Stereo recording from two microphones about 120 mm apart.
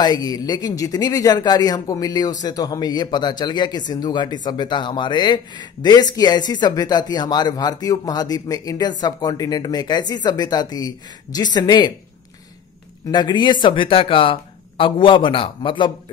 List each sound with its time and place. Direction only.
0.0 s speech: 35° left (ahead or behind)
13.1 s speech: 35° left (ahead or behind)